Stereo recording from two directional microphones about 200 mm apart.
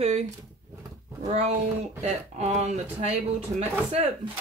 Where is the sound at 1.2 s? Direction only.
30° right (ahead or behind).